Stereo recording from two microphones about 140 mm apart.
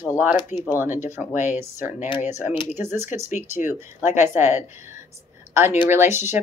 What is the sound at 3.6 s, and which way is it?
Speech, 15° right (ahead or behind).